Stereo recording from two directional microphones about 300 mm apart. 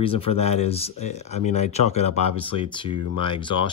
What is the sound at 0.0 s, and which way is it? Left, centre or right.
Speech, centre.